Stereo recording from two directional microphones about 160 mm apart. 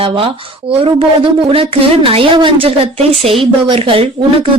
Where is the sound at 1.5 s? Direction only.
35° right (ahead or behind).